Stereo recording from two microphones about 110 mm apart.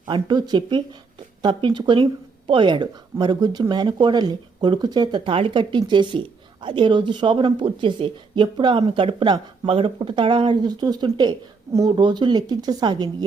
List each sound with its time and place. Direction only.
0.1 s speech: 40° right (ahead or behind)